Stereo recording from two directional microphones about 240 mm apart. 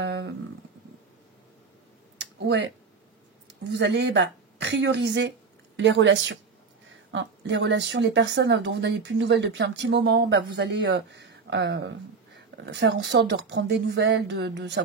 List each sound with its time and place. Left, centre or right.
0.0 s wild animals: right
2.4 s a woman's voice: right